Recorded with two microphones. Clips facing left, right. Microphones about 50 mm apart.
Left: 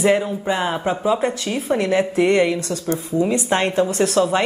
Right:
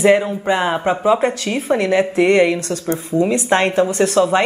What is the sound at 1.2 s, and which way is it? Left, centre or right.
Speech, right.